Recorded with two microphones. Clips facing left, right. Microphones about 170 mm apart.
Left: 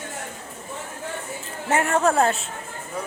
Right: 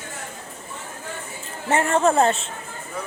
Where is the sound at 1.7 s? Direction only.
Centre (ahead or behind).